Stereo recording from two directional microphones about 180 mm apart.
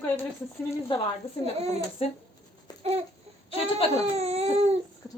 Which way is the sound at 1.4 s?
35° right (ahead or behind).